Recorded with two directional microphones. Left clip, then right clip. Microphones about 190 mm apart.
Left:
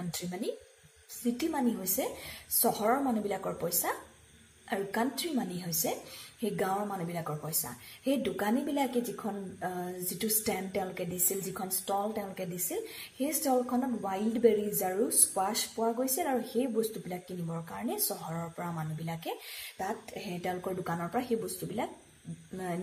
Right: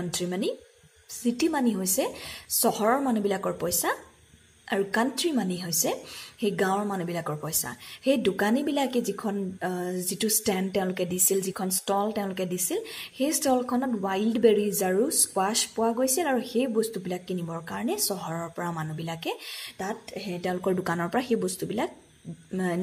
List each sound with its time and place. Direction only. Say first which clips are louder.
0.1 s a woman's voice: right 6 dB; 35° right (ahead or behind)
20.6 s a woman's voice: right 8 dB; 40° right (ahead or behind)